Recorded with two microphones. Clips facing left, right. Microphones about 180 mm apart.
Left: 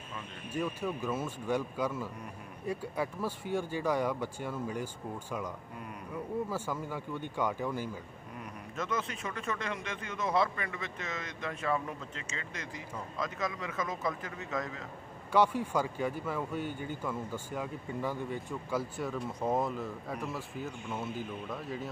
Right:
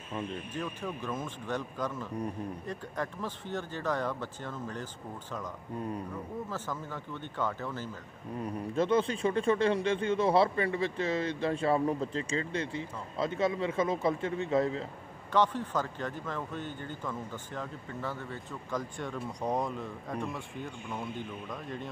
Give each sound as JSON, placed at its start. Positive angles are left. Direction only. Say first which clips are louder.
{"t": 0.5, "sound": "speech", "louder": "left 3 dB", "side_deg": 10}
{"t": 5.8, "sound": "speech", "louder": "right 8 dB", "side_deg": -30}
{"t": 6.5, "sound": "speech", "louder": "left 2 dB", "side_deg": 10}
{"t": 8.4, "sound": "speech", "louder": "right 9 dB", "side_deg": -30}
{"t": 15.3, "sound": "speech", "louder": "left 1 dB", "side_deg": 10}